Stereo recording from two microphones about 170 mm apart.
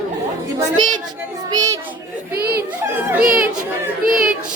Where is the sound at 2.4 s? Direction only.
65° right (ahead or behind).